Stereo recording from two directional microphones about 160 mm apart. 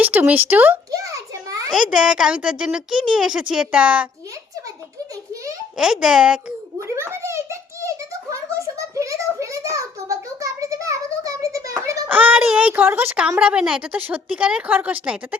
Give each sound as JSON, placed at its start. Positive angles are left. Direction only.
{"t": 0.0, "sound": "a woman's voice", "side_deg": -10}
{"t": 0.9, "sound": "a sound", "side_deg": -20}
{"t": 1.7, "sound": "a woman's voice", "side_deg": -5}
{"t": 5.7, "sound": "speech", "side_deg": -5}
{"t": 6.8, "sound": "a sound", "side_deg": -15}
{"t": 11.8, "sound": "a woman's voice", "side_deg": -20}